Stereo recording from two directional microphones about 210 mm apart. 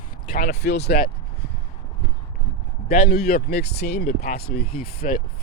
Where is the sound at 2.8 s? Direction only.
45° left (ahead or behind).